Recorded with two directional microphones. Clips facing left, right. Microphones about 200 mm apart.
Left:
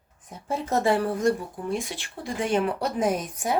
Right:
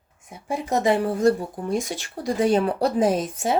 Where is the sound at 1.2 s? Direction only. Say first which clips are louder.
Right 4 dB; 35° right (ahead or behind).